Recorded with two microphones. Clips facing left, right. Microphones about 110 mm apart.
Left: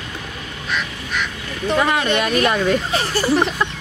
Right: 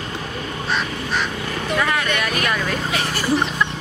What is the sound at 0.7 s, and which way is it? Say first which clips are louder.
Duck: right 1 dB; 35° right (ahead or behind).